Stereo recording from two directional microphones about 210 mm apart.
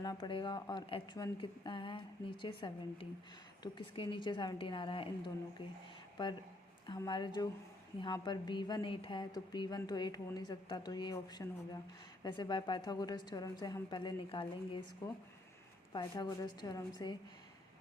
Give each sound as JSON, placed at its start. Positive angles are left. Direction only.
{"t": 0.0, "sound": "a woman's voice", "side_deg": 20}